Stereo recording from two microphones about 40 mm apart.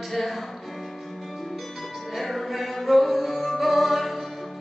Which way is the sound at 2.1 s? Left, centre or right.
Centre.